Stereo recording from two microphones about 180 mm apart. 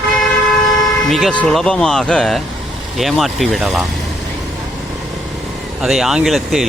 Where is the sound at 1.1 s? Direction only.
Centre (ahead or behind).